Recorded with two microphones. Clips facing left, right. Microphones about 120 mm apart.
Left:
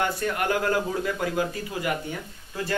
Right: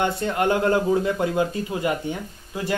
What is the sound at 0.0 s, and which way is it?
Speech, 25° right (ahead or behind).